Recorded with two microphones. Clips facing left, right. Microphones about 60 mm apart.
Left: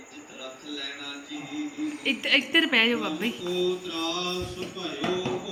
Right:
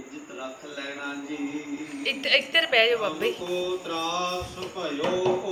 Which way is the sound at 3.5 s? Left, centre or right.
Right.